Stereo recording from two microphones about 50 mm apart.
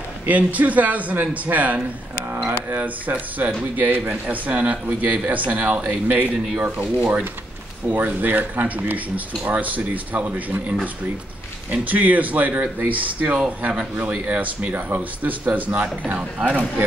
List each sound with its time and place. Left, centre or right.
0.3 s speech: right
3.1 s speech: right
7.9 s speech: right
16.2 s speech: centre